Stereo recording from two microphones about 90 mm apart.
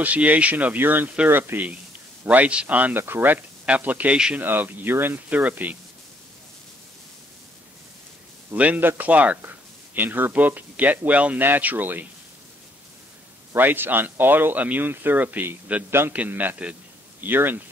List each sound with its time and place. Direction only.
0.0 s speech: 15° right (ahead or behind)
8.5 s speech: 20° right (ahead or behind)
13.6 s speech: 20° right (ahead or behind)